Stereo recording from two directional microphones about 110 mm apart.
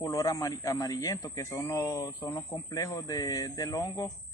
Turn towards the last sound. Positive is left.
turn(degrees=35)  # may be behind; listen again after turning